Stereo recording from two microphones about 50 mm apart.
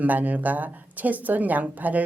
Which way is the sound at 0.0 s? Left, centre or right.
Right.